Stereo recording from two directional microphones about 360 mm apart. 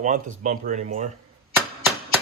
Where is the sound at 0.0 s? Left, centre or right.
Right.